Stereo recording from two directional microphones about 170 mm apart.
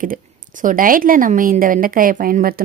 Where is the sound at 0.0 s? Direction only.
50° right (ahead or behind).